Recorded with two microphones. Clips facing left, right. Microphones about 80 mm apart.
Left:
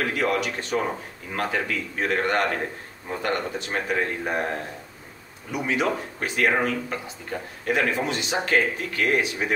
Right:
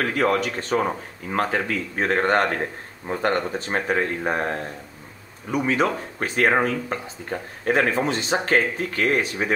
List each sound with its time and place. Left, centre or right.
0.0 s speech: right